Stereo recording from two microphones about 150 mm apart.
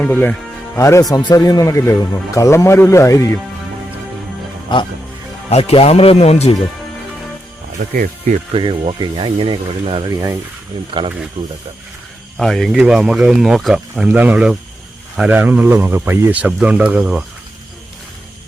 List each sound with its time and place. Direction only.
0.0 s speech: 10° left (ahead or behind)
4.7 s speech: 30° left (ahead or behind)
5.5 s speech: 45° left (ahead or behind)
8.5 s speech: 40° right (ahead or behind)
12.4 s speech: centre (ahead or behind)